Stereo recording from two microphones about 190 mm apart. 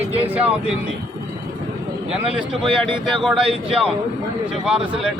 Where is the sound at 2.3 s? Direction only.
Centre (ahead or behind).